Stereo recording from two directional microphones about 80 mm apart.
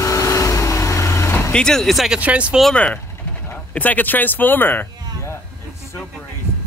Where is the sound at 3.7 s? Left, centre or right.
Left.